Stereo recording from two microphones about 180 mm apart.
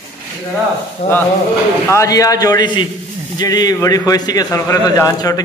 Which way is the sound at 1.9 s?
15° left (ahead or behind).